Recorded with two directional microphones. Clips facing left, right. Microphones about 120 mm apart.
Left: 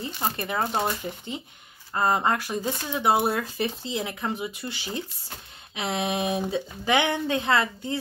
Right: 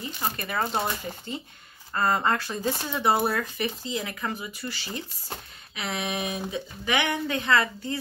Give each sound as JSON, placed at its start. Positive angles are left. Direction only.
{"t": 0.0, "sound": "speech", "side_deg": 30}
{"t": 0.5, "sound": "speech", "side_deg": 15}